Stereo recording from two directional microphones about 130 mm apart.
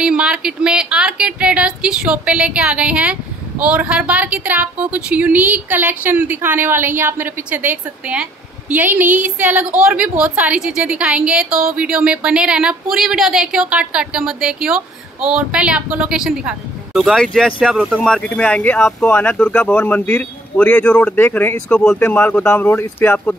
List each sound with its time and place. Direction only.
0.0 s a woman's voice: 5° right (ahead or behind)
17.9 s speech: 5° left (ahead or behind)